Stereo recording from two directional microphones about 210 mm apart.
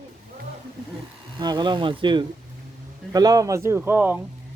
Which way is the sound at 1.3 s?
20° right (ahead or behind).